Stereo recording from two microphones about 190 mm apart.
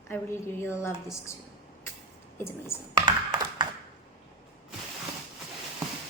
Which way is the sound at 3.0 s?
25° right (ahead or behind).